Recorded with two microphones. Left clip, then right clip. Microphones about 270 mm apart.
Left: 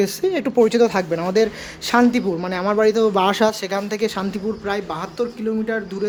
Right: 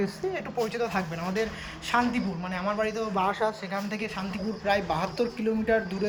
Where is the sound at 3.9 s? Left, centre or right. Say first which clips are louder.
Left 11 dB; left.